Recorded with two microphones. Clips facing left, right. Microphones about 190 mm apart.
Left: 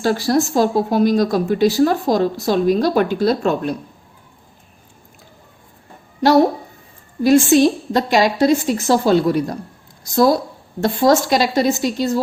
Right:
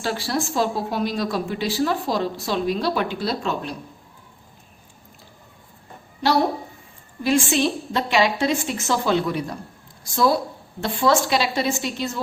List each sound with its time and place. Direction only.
0.0 s a woman's voice: 45° left (ahead or behind)
7.2 s a woman's voice: 40° left (ahead or behind)